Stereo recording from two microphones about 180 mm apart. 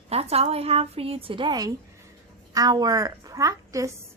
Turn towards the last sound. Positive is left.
turn(degrees=-20)  # may be behind; listen again after turning